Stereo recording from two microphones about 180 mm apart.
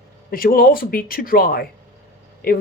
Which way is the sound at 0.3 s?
55° left (ahead or behind).